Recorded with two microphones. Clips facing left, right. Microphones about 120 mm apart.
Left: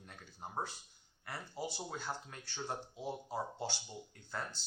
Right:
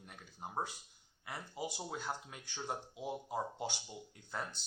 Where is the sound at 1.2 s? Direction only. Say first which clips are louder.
Even; 15° right (ahead or behind).